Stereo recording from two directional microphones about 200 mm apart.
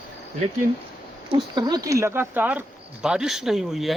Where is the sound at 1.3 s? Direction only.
20° right (ahead or behind).